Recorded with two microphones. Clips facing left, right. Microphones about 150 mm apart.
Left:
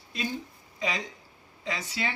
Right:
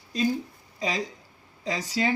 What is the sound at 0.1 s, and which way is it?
A woman's voice, 40° right (ahead or behind).